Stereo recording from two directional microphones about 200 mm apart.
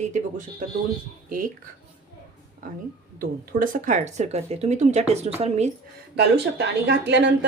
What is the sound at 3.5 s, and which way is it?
A woman's voice, 40° right (ahead or behind).